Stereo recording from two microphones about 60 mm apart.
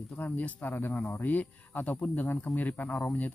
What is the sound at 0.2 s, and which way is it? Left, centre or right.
Speech, left.